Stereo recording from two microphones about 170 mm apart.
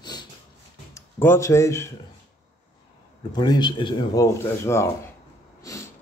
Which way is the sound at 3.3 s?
25° left (ahead or behind).